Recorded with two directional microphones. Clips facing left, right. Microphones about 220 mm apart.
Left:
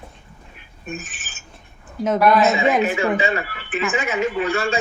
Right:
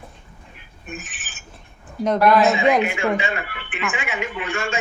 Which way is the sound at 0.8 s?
40° left (ahead or behind).